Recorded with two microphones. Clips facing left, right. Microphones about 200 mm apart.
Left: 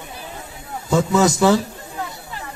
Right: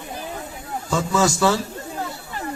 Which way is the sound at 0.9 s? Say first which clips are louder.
Left 4 dB; 20° left (ahead or behind).